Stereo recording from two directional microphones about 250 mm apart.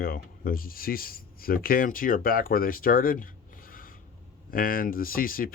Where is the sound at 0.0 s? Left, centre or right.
Left.